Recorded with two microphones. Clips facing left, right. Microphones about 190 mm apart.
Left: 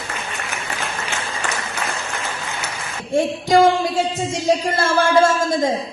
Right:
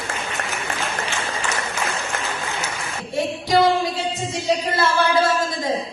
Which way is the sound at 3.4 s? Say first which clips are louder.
Left 2 dB; 45° left (ahead or behind).